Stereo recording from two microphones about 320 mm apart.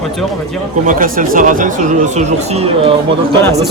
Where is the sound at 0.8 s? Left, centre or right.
Right.